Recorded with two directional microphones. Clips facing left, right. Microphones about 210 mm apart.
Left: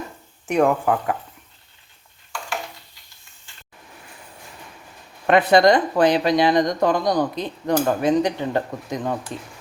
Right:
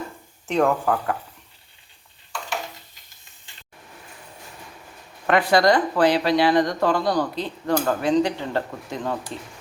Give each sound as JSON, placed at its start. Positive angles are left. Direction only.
{"t": 0.4, "sound": "speech", "side_deg": 15}
{"t": 5.2, "sound": "speech", "side_deg": 20}